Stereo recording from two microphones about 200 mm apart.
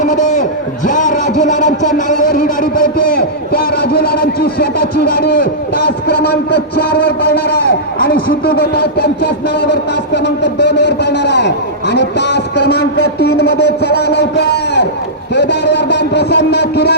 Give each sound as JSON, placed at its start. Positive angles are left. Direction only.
{"t": 0.0, "sound": "a sound", "side_deg": 40}
{"t": 0.9, "sound": "speech", "side_deg": 40}
{"t": 7.9, "sound": "speech", "side_deg": 50}
{"t": 10.2, "sound": "a man's voice", "side_deg": 55}